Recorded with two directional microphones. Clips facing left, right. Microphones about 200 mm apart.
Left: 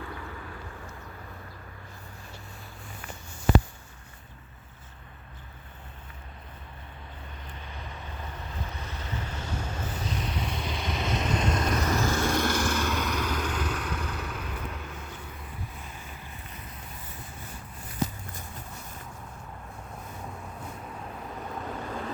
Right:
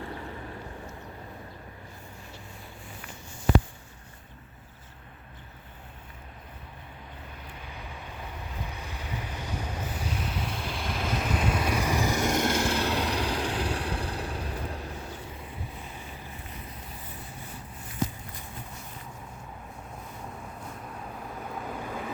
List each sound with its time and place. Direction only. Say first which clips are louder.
0.0 s vehicle: right 2 dB; 30° right (ahead or behind)
7.5 s vehicle: left 1 dB; 10° right (ahead or behind); by 15.2 s 35° right (ahead or behind)
21.3 s vehicle: left 1 dB; 5° right (ahead or behind)